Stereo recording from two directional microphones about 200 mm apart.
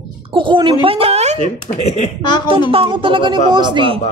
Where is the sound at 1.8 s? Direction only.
35° left (ahead or behind).